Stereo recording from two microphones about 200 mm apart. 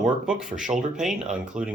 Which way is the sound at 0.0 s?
5° right (ahead or behind).